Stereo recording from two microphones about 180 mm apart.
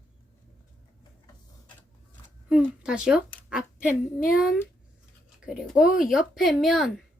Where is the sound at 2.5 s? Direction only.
5° right (ahead or behind).